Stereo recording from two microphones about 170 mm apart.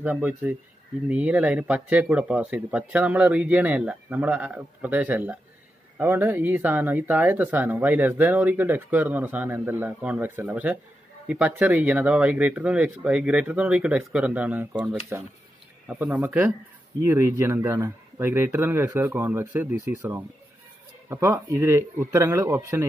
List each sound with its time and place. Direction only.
0.0 s speech: 10° right (ahead or behind)